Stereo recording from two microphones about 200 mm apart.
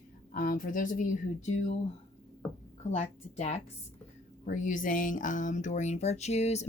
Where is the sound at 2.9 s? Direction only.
35° left (ahead or behind).